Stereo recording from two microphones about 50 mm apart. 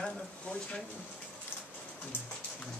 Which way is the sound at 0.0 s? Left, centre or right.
Centre.